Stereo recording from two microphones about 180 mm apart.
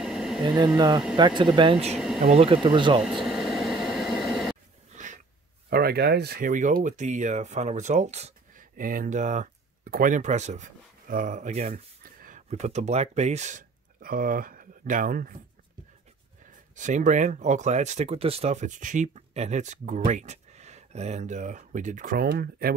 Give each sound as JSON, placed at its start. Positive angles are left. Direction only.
{"t": 0.0, "sound": "a sound", "side_deg": 0}
{"t": 0.7, "sound": "speech", "side_deg": -25}
{"t": 3.0, "sound": "air conditioning", "side_deg": 0}
{"t": 4.9, "sound": "a sound", "side_deg": -45}
{"t": 5.7, "sound": "speech", "side_deg": -60}
{"t": 16.7, "sound": "speech", "side_deg": -45}